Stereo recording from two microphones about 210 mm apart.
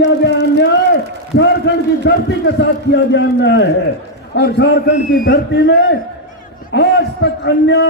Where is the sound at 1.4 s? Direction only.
55° left (ahead or behind).